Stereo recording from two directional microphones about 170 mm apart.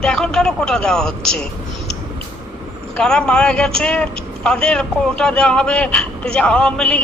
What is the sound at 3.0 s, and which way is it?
Speech, 5° left (ahead or behind).